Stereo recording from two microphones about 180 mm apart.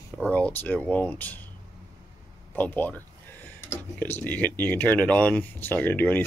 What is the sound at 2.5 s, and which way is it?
Speech, 10° left (ahead or behind).